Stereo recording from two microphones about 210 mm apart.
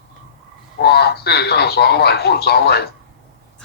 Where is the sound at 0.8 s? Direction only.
50° left (ahead or behind).